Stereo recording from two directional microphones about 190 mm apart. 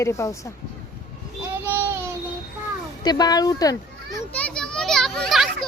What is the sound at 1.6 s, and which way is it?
Child singing, 10° right (ahead or behind).